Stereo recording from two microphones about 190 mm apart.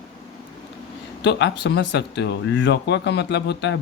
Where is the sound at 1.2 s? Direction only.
65° left (ahead or behind).